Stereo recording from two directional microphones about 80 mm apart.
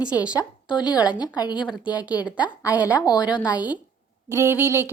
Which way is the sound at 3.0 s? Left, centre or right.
Left.